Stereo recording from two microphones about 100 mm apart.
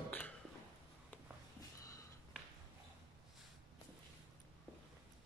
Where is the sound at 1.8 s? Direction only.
35° left (ahead or behind).